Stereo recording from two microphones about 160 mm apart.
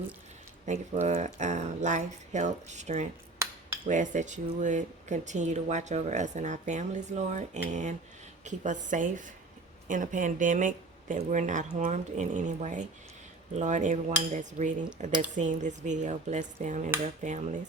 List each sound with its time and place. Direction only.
0.6 s speech: 45° right (ahead or behind)